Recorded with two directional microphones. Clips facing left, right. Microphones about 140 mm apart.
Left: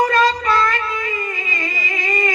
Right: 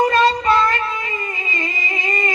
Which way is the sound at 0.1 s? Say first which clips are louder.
Right 1 dB; 30° right (ahead or behind).